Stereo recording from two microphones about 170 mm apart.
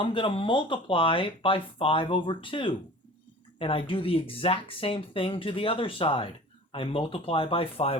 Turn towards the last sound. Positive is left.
turn(degrees=35)  # may be behind; listen again after turning